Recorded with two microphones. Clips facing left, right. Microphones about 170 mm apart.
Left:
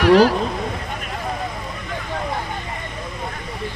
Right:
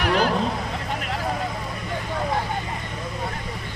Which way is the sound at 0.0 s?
40° left (ahead or behind).